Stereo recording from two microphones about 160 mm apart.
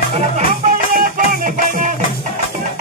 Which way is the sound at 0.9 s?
60° right (ahead or behind).